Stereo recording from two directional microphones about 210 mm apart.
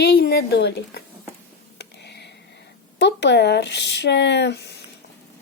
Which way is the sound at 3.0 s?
55° left (ahead or behind).